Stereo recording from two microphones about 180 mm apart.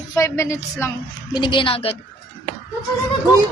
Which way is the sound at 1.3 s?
25° left (ahead or behind).